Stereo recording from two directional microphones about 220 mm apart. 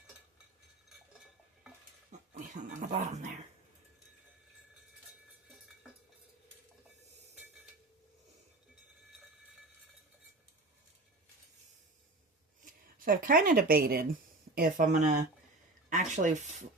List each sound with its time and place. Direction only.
2.0 s dog: 35° right (ahead or behind)
12.6 s speech: 40° right (ahead or behind)